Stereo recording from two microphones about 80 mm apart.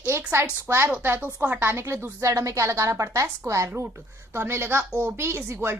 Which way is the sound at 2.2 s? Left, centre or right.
Right.